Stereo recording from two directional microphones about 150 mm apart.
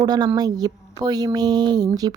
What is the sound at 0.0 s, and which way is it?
A woman's voice, 25° right (ahead or behind).